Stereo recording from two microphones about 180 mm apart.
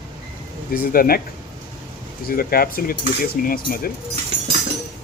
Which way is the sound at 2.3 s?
55° left (ahead or behind).